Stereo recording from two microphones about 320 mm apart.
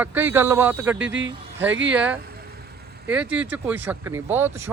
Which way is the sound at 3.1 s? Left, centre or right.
Centre.